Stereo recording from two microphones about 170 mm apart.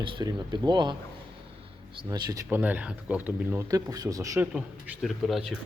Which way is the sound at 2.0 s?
25° right (ahead or behind).